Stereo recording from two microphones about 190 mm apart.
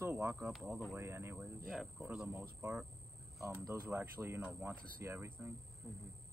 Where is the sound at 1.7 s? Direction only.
Centre (ahead or behind).